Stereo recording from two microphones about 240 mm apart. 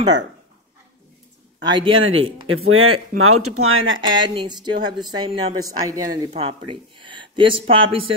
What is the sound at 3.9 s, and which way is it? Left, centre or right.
Speech, centre.